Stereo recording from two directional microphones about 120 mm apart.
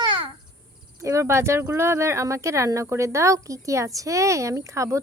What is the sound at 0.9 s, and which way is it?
Speech, 25° right (ahead or behind).